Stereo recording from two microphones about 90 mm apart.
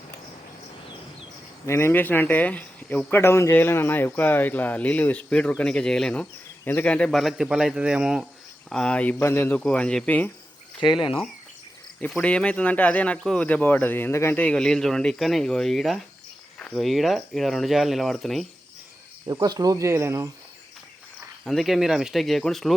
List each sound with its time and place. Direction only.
1.6 s speech: 30° left (ahead or behind)
7.1 s speech: centre (ahead or behind)
8.7 s speech: 10° left (ahead or behind)
9.1 s speech: 25° left (ahead or behind)
9.6 s speech: 10° left (ahead or behind)
12.2 s speech: 10° left (ahead or behind); by 14.3 s 30° left (ahead or behind)
14.3 s speech: 10° left (ahead or behind)
19.3 s speech: 45° right (ahead or behind)
19.9 s speech: 30° right (ahead or behind)
21.4 s speech: centre (ahead or behind)